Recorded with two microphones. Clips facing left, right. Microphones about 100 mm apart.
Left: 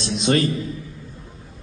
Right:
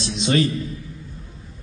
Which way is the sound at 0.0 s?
50° left (ahead or behind).